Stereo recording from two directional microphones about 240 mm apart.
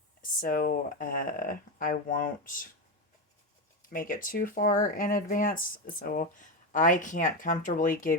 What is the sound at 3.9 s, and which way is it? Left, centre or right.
Speech, left.